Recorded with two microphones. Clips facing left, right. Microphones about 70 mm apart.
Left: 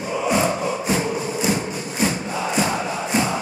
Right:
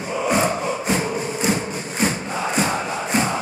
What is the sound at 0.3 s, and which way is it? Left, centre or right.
Crowd, right.